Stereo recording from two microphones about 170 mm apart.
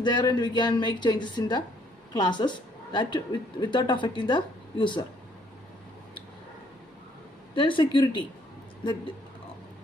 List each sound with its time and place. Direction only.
0.0 s a woman's voice: 25° left (ahead or behind)
7.5 s a woman's voice: 30° left (ahead or behind)